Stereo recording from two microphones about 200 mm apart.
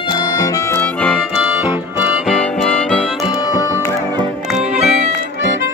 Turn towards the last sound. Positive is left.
turn(degrees=-35)  # may be behind; listen again after turning